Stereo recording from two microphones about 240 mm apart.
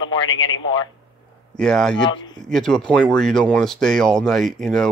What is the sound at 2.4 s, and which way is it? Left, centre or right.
Speech, centre.